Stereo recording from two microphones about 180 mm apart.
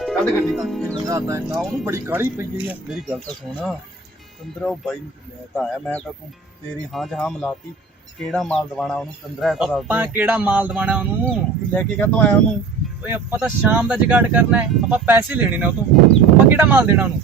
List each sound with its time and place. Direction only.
0.0 s speech: centre (ahead or behind)
0.9 s speech: 20° right (ahead or behind)
2.9 s speech: centre (ahead or behind)
11.7 s speech: 10° left (ahead or behind)
13.0 s speech: 10° right (ahead or behind)